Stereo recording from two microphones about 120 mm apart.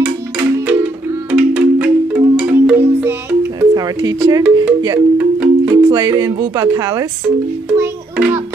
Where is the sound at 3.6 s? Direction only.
35° right (ahead or behind).